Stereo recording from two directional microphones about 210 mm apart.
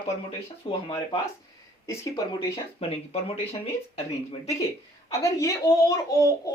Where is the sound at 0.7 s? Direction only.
25° left (ahead or behind).